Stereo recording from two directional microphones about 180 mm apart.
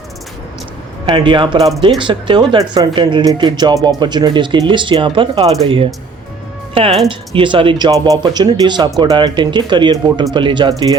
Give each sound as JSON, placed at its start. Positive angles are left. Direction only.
{"t": 1.0, "sound": "speech", "side_deg": -25}
{"t": 7.1, "sound": "speech", "side_deg": -30}